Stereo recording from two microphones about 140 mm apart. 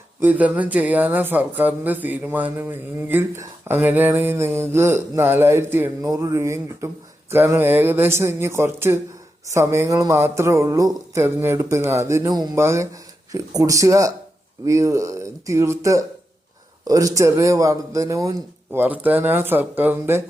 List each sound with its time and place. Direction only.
0.2 s a man's voice: 10° right (ahead or behind)